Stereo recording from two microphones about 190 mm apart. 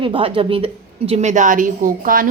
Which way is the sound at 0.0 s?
25° right (ahead or behind).